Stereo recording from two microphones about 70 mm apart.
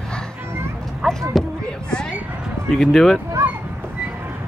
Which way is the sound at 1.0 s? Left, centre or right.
Centre.